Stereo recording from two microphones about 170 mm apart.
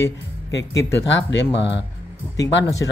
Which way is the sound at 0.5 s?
90° left.